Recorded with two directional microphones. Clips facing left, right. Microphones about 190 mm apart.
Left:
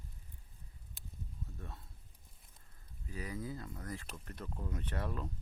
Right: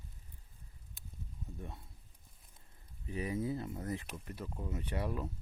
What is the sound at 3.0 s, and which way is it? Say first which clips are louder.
Speech: right 6 dB; 25° right (ahead or behind).